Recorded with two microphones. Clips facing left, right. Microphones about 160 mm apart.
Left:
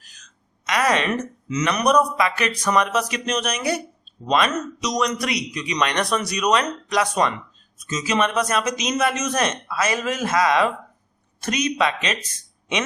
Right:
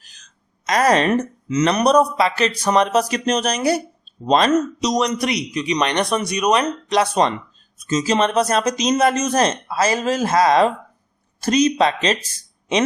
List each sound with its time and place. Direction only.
0.0 s a woman's voice: 30° right (ahead or behind)